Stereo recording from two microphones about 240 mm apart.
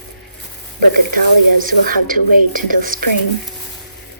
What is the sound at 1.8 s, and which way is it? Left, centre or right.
Speech, right.